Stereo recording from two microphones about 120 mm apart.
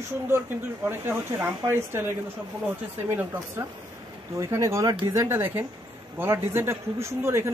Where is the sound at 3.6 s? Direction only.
30° right (ahead or behind).